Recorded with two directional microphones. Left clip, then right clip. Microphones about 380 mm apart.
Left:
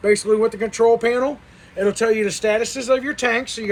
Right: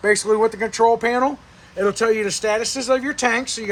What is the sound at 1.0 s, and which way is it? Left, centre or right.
Speech, right.